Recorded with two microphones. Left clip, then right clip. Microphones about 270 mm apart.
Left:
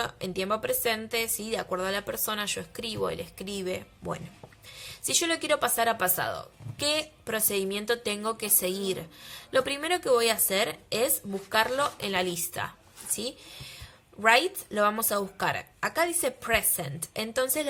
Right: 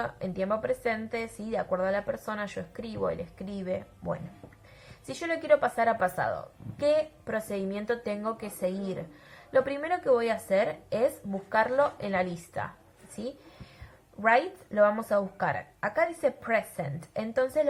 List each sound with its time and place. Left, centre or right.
0.0 s a woman's voice: left
11.5 s a woman's voice: left
14.2 s a woman's voice: left
15.8 s a woman's voice: left